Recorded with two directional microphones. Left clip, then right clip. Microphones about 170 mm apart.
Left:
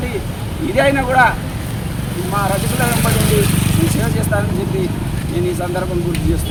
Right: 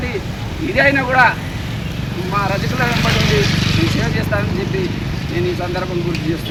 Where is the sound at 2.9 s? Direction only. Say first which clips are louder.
Right 1 dB; 70° left (ahead or behind); by 3.8 s 55° left (ahead or behind).